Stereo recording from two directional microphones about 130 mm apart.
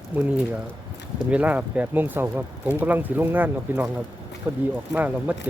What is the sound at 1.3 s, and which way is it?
Speech, 10° right (ahead or behind).